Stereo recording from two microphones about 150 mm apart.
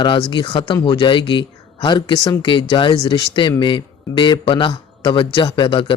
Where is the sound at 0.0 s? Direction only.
30° left (ahead or behind).